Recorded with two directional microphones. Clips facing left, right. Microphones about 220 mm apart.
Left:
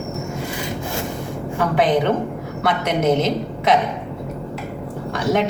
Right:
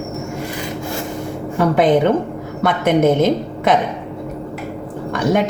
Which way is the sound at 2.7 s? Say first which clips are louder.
Right 4 dB; 50° right (ahead or behind).